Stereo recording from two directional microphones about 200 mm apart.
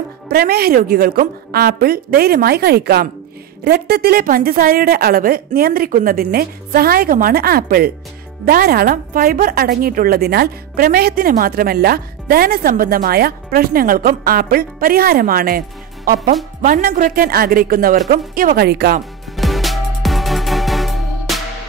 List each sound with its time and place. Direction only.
0.3 s a woman's voice: 50° right (ahead or behind)
16.6 s a woman's voice: 45° right (ahead or behind)
19.3 s music: centre (ahead or behind)